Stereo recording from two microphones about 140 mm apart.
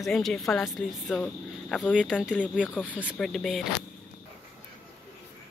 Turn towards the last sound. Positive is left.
turn(degrees=0)  # may be behind; listen again after turning